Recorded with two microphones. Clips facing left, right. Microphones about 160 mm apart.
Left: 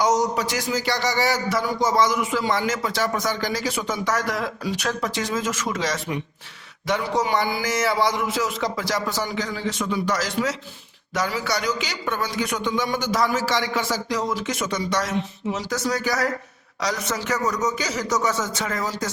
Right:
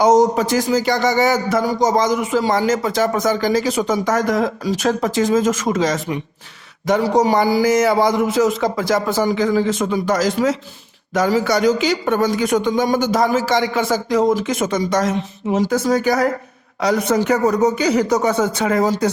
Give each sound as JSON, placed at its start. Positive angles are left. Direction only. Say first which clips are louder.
{"t": 0.0, "sound": "speech", "louder": "right 8 dB", "side_deg": -50}